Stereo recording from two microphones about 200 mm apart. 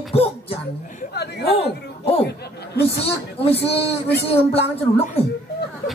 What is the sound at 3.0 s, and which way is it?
A woman's voice, 30° left (ahead or behind).